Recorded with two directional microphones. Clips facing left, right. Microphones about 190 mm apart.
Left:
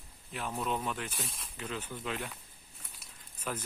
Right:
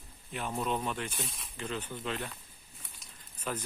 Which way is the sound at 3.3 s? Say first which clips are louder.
Right 1 dB; 5° left (ahead or behind).